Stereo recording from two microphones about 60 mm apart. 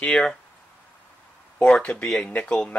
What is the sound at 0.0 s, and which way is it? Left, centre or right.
Speech, centre.